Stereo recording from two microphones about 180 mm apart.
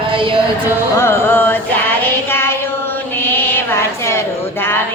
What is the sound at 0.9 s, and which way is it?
Music, 15° left (ahead or behind).